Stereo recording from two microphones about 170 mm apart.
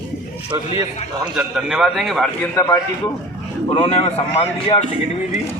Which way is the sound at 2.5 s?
15° left (ahead or behind).